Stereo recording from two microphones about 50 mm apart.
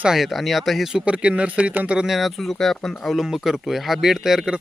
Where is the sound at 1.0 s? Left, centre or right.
Right.